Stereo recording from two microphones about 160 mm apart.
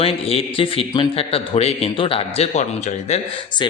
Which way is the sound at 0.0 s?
35° left (ahead or behind).